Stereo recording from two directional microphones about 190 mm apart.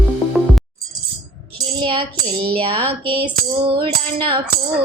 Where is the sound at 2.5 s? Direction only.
30° right (ahead or behind).